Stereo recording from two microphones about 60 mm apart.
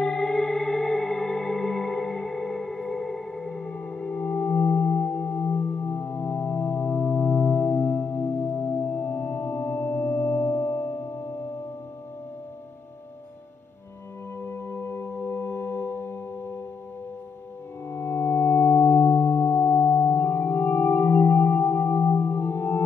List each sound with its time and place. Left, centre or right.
0.0 s music: centre; by 11.2 s left
14.4 s singing bowl: left
17.8 s singing bowl: left